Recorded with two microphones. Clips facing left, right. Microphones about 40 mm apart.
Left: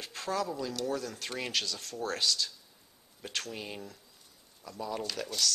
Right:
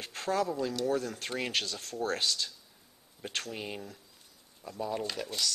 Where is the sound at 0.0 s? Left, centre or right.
Right.